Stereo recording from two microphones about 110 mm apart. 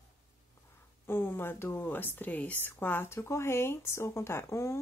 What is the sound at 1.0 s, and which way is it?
Speech, 20° left (ahead or behind).